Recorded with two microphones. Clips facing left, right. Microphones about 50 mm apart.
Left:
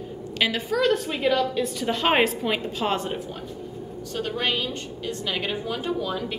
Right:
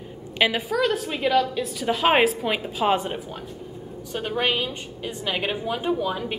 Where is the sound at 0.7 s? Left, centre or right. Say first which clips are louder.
Left 1 dB; centre.